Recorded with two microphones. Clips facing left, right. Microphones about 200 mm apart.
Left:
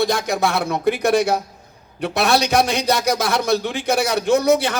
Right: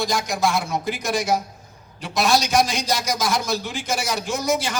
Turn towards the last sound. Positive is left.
turn(degrees=60)  # may be behind; listen again after turning